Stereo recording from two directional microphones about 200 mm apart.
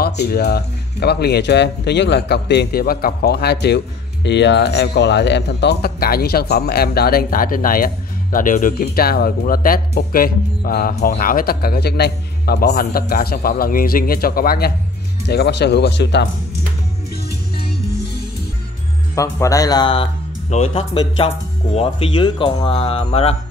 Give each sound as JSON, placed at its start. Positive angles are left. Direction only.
{"t": 0.0, "sound": "speech", "side_deg": 50}
{"t": 19.1, "sound": "speech", "side_deg": 15}